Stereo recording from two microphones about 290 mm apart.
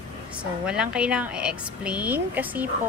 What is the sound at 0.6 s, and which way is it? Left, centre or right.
A woman's voice, centre.